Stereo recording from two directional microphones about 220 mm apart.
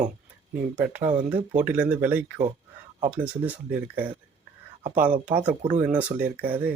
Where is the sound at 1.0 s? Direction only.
25° right (ahead or behind).